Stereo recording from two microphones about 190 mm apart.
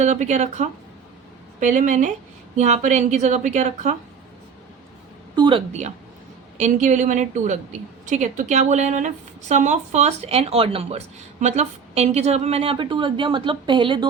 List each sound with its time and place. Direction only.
0.0 s a woman's voice: 35° right (ahead or behind)
5.4 s a woman's voice: 25° right (ahead or behind)